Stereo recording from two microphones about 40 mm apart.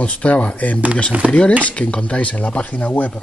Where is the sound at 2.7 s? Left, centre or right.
Left.